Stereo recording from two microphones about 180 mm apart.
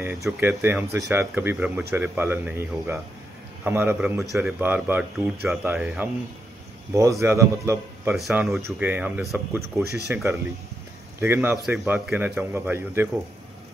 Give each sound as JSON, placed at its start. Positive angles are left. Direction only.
{"t": 0.0, "sound": "speech", "side_deg": -10}
{"t": 8.1, "sound": "speech", "side_deg": -5}